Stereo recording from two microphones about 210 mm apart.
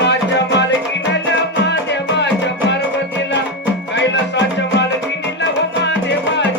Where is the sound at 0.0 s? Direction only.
55° left (ahead or behind).